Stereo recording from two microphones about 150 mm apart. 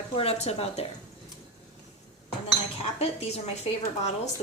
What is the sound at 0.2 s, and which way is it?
Speech, 45° left (ahead or behind).